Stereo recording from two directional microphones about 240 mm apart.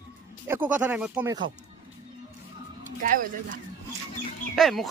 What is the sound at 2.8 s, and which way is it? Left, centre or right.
Speech, right.